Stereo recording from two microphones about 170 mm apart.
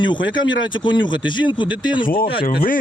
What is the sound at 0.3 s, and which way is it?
Speech, 25° left (ahead or behind).